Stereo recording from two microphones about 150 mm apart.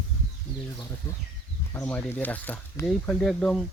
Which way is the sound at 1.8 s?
10° left (ahead or behind).